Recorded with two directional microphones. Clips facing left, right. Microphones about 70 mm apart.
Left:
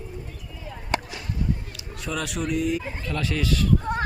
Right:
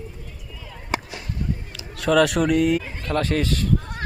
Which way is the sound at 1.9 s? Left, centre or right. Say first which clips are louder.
Right 12 dB; right.